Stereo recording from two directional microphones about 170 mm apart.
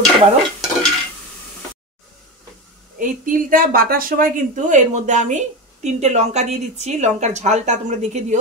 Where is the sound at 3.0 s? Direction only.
55° right (ahead or behind).